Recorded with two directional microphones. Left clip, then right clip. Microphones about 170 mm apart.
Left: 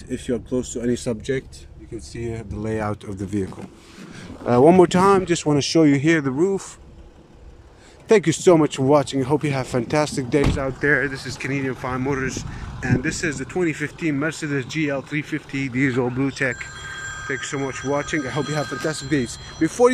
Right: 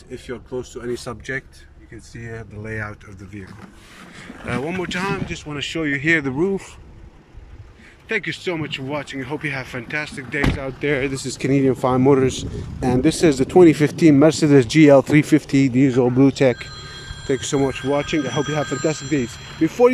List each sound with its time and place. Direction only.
0.1 s speech: 25° left (ahead or behind)
4.6 s speech: 50° left (ahead or behind)
5.5 s speech: 30° left (ahead or behind)
6.2 s speech: 10° right (ahead or behind)
8.1 s speech: 35° left (ahead or behind)
10.6 s speech: 5° right (ahead or behind)
11.4 s speech: 25° right (ahead or behind)
15.7 s speech: 10° right (ahead or behind)
16.2 s speech: 20° right (ahead or behind); by 19.9 s 5° right (ahead or behind)